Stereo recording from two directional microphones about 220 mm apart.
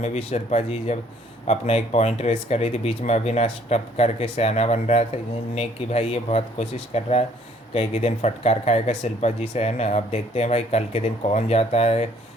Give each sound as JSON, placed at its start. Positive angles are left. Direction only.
{"t": 0.0, "sound": "speech", "side_deg": 30}